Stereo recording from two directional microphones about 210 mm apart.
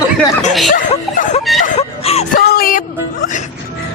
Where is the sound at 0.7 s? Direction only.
35° left (ahead or behind).